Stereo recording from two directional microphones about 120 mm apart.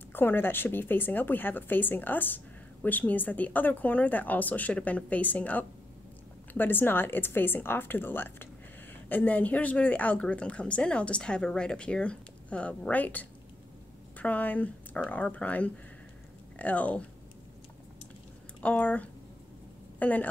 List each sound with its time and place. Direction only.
0.1 s speech: 15° left (ahead or behind)
18.6 s speech: 10° left (ahead or behind)